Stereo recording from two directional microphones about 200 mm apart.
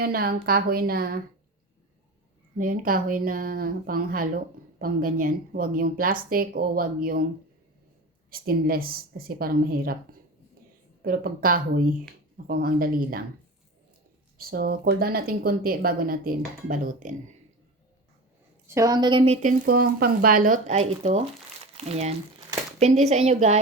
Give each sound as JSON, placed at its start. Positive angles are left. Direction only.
{"t": 0.0, "sound": "a woman's voice", "side_deg": -50}
{"t": 2.6, "sound": "a woman's voice", "side_deg": -45}
{"t": 8.3, "sound": "a woman's voice", "side_deg": -45}
{"t": 11.0, "sound": "a woman's voice", "side_deg": -45}
{"t": 14.3, "sound": "a woman's voice", "side_deg": -45}
{"t": 18.7, "sound": "speech", "side_deg": -15}